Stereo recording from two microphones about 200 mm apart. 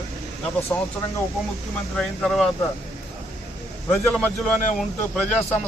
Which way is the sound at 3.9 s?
10° left (ahead or behind).